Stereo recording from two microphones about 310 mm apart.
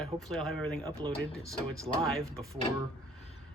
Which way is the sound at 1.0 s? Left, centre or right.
Centre.